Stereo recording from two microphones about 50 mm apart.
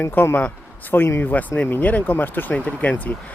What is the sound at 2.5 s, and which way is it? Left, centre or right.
Speech, left.